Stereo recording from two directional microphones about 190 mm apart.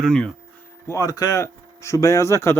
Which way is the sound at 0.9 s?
15° left (ahead or behind).